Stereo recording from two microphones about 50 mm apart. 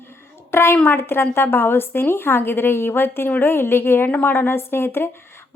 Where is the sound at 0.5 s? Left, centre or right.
Left.